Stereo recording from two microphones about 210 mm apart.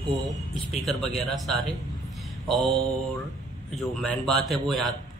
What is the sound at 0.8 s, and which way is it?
Speech, centre (ahead or behind).